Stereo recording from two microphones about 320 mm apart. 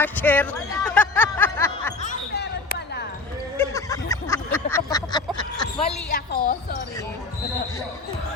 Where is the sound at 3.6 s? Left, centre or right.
Centre.